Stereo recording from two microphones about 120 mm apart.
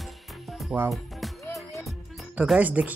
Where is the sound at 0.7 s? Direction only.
5° right (ahead or behind).